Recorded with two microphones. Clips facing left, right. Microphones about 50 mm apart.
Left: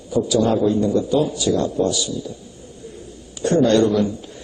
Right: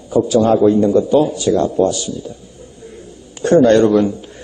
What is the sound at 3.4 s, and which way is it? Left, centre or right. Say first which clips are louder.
Speech: right 5 dB; right.